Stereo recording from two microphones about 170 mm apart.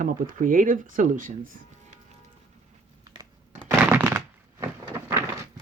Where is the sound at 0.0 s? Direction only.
50° right (ahead or behind).